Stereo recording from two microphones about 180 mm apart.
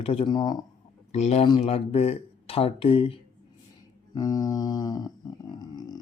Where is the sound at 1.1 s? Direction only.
35° left (ahead or behind).